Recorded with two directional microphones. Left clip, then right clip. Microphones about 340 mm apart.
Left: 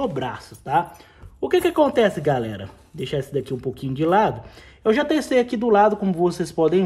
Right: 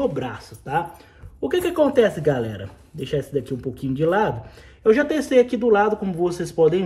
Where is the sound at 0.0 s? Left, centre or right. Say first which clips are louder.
Right 1 dB; left.